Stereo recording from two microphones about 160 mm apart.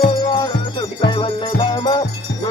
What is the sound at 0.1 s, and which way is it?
Music, 30° left (ahead or behind).